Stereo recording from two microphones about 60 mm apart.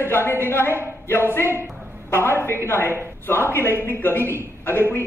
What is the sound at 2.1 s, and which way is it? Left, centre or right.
A man's voice, left.